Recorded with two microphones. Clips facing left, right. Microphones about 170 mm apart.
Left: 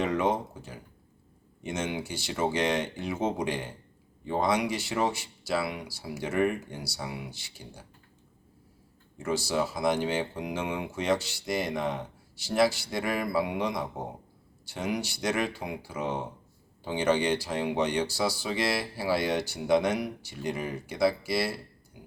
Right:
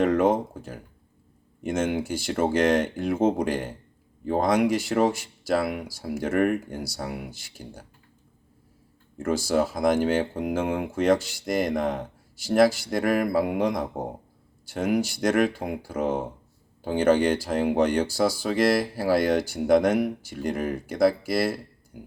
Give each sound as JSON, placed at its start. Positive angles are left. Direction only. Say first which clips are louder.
{"t": 0.0, "sound": "speech", "louder": "right 6 dB", "side_deg": -50}
{"t": 9.1, "sound": "speech", "louder": "right 5 dB", "side_deg": -50}